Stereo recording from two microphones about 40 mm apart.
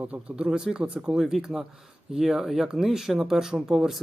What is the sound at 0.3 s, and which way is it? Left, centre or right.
Speech, centre.